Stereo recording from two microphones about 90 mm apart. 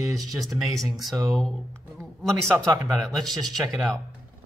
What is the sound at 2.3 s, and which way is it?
Speech, 35° right (ahead or behind).